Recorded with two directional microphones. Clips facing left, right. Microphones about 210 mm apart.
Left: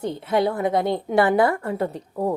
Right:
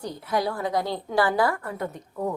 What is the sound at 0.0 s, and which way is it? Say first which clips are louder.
A woman's voice: left 5 dB; 25° left (ahead or behind).